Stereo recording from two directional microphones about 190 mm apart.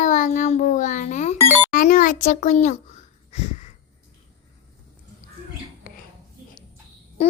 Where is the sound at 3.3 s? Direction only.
35° left (ahead or behind).